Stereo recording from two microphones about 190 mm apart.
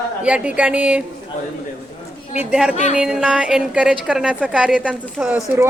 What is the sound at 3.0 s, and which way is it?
A woman's voice, 5° right (ahead or behind).